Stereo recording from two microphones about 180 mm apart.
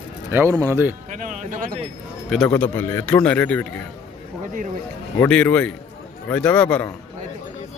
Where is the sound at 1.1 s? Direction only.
45° right (ahead or behind).